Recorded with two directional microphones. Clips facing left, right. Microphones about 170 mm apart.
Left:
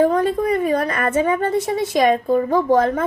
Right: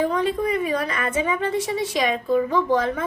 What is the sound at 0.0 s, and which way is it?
A woman's voice, 50° left (ahead or behind).